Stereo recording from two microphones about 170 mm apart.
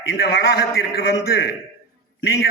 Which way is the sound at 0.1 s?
70° left (ahead or behind).